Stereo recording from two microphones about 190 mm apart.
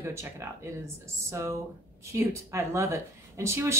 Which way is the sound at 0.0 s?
15° right (ahead or behind).